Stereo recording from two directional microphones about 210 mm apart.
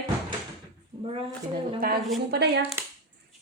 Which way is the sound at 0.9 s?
25° right (ahead or behind).